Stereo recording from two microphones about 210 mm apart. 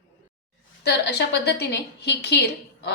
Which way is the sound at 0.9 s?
55° left (ahead or behind).